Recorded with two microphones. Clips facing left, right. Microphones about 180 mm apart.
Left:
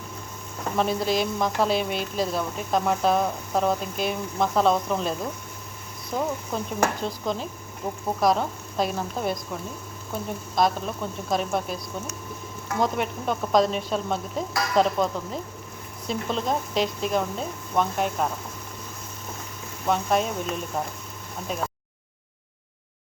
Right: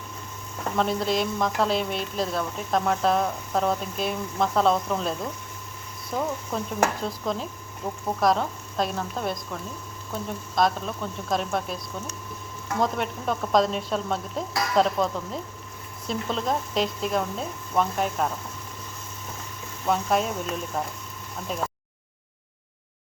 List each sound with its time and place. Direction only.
0.8 s speech: 5° left (ahead or behind)
7.8 s speech: 10° left (ahead or behind)
8.2 s speech: centre (ahead or behind)
19.8 s speech: centre (ahead or behind)